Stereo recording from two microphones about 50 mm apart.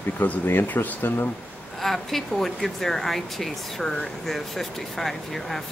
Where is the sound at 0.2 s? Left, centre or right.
Left.